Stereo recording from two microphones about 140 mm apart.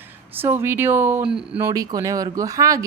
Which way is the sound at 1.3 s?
5° right (ahead or behind).